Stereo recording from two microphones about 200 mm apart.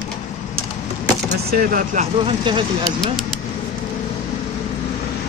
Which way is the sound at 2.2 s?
25° right (ahead or behind).